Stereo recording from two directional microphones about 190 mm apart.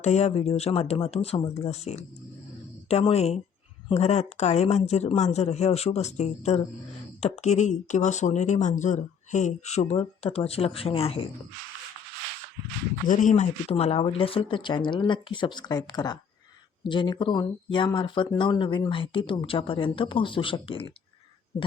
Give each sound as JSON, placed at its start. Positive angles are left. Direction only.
{"t": 0.0, "sound": "speech", "side_deg": 35}
{"t": 13.1, "sound": "speech", "side_deg": 40}